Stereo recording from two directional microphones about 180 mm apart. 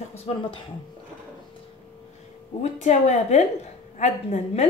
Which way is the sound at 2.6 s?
40° left (ahead or behind).